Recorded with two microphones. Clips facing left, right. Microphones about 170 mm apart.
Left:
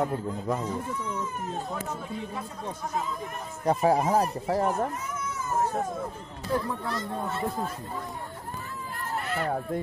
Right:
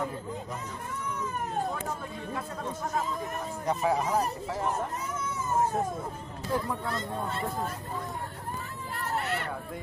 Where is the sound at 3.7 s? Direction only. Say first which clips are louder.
Left 5 dB; 35° left (ahead or behind).